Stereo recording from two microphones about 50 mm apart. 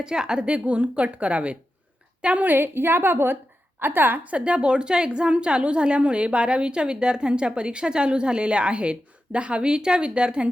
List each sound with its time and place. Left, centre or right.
0.0 s a woman's voice: centre
2.5 s a woman's voice: right
4.4 s a woman's voice: right